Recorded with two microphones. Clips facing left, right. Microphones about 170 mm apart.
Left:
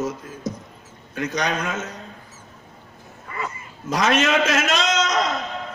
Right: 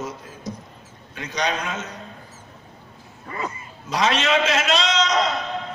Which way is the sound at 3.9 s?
45° left (ahead or behind).